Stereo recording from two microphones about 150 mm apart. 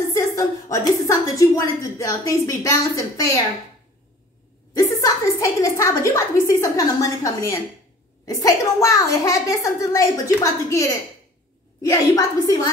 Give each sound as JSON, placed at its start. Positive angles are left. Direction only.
{"t": 0.0, "sound": "a woman's voice", "side_deg": 20}
{"t": 4.7, "sound": "a woman's voice", "side_deg": 20}